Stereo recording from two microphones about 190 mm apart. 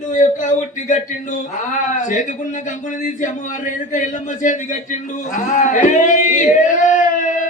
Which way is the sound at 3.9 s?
40° left (ahead or behind).